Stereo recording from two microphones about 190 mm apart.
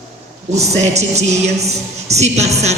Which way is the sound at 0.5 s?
35° right (ahead or behind).